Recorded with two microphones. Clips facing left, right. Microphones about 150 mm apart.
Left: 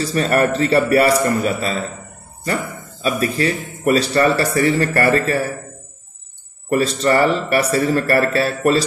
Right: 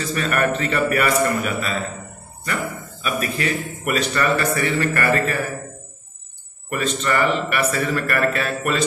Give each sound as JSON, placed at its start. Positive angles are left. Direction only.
{"t": 0.0, "sound": "a man's voice", "side_deg": 35}
{"t": 2.4, "sound": "a sound", "side_deg": 35}
{"t": 3.3, "sound": "a man's voice", "side_deg": 30}
{"t": 6.7, "sound": "a man's voice", "side_deg": 35}